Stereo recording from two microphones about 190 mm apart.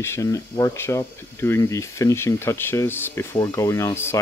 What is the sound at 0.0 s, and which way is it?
Speech, 15° left (ahead or behind).